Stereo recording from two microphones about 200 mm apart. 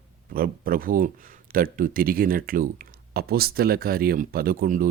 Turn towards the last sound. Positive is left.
turn(degrees=-45)  # may be behind; listen again after turning